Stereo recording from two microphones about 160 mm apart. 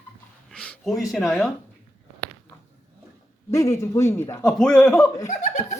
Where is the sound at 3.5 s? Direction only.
20° left (ahead or behind).